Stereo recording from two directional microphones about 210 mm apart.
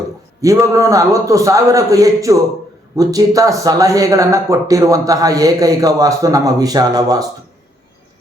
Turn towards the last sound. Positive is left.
turn(degrees=-15)  # may be behind; listen again after turning